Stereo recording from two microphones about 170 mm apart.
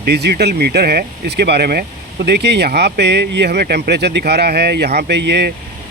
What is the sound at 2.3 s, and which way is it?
Speech, 80° right.